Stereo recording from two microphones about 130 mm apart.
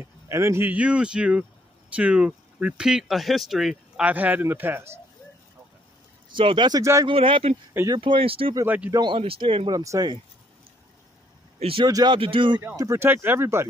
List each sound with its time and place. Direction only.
0.3 s speech: 20° right (ahead or behind)
6.3 s speech: 40° right (ahead or behind)
6.8 s speech: 25° right (ahead or behind)
7.1 s speech: 40° right (ahead or behind)
8.6 s speech: 10° right (ahead or behind)
8.9 s speech: 35° right (ahead or behind)
9.7 s speech: 30° right (ahead or behind)
11.6 s speech: 45° right (ahead or behind)
11.9 s speech: 35° right (ahead or behind)
12.7 s speech: 25° right (ahead or behind)